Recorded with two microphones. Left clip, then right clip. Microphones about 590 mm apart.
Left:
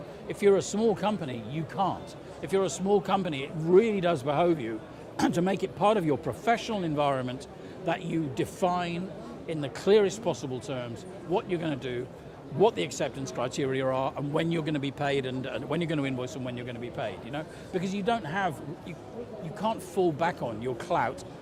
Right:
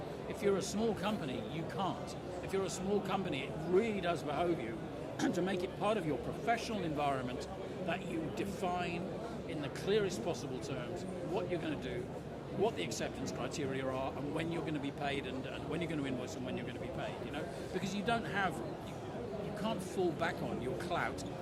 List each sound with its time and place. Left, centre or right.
0.4 s a man's voice: left
19.6 s a man's voice: left